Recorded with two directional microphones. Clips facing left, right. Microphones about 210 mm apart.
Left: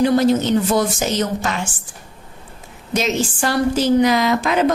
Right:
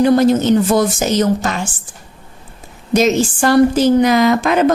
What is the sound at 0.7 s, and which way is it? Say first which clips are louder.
Speech: right 4 dB; 40° right (ahead or behind).